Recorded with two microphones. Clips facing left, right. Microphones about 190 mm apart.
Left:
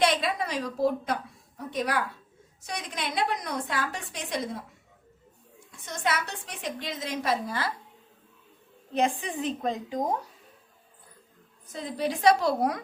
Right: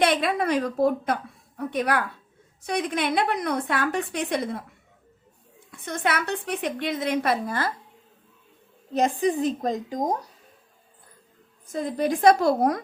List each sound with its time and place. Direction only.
0.0 s a woman's voice: 55° right (ahead or behind)
5.7 s a woman's voice: 60° right (ahead or behind)
8.9 s a woman's voice: 40° right (ahead or behind)
11.7 s a woman's voice: 50° right (ahead or behind)